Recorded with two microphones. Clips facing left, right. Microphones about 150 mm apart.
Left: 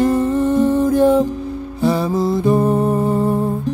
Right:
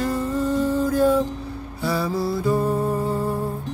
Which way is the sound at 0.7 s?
20° left (ahead or behind).